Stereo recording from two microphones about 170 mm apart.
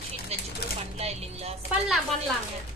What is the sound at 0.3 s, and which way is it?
Chopping, 35° right (ahead or behind).